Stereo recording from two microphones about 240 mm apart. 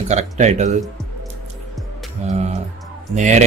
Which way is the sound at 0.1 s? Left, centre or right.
Right.